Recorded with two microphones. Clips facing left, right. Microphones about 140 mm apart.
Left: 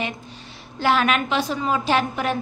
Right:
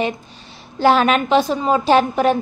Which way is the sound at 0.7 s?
35° right (ahead or behind).